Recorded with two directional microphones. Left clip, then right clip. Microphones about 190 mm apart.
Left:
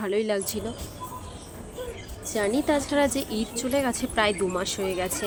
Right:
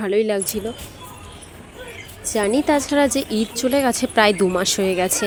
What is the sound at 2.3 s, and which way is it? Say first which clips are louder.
Speech: right 6 dB; 35° right (ahead or behind).